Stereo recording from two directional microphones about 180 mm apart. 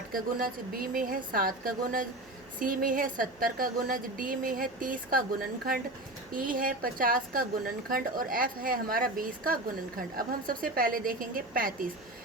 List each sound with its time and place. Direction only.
0.1 s a woman's voice: 50° right (ahead or behind)